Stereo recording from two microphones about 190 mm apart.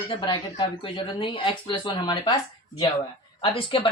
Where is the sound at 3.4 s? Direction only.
25° left (ahead or behind).